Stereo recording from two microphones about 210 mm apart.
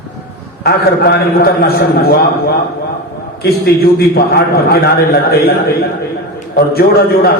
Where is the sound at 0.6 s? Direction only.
45° left (ahead or behind).